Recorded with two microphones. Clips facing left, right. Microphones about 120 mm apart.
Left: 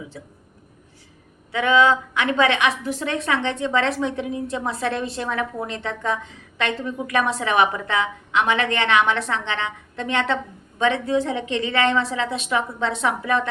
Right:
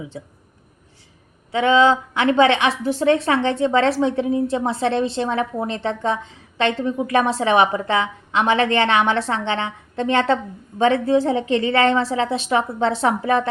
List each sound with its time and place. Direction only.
0.1 s speech: 25° right (ahead or behind)
1.5 s a woman's voice: 30° right (ahead or behind)